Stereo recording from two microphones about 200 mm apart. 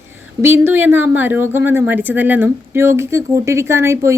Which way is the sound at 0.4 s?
10° right (ahead or behind).